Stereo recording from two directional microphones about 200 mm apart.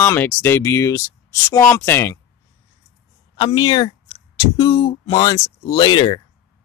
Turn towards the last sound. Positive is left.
turn(degrees=20)  # may be behind; listen again after turning